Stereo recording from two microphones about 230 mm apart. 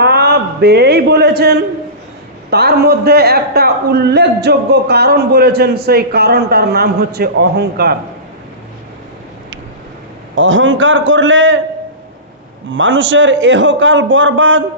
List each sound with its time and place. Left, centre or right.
0.0 s a man's voice: right
10.3 s a man's voice: right
12.7 s a man's voice: right